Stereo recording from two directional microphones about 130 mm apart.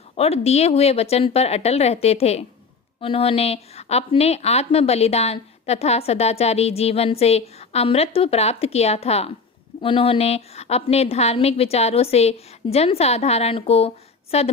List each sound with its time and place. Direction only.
0.2 s a woman's voice: 50° left (ahead or behind)